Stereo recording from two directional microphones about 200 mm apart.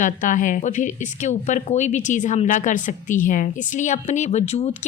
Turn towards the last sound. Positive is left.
turn(degrees=35)  # may be behind; listen again after turning